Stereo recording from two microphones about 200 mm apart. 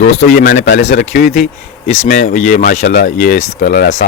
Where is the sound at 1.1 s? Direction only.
45° left (ahead or behind).